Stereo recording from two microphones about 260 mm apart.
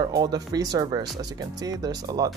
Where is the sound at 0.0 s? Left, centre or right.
Centre.